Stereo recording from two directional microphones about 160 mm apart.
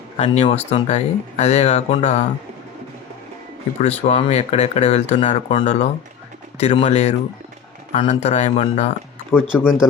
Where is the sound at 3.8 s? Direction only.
45° left (ahead or behind).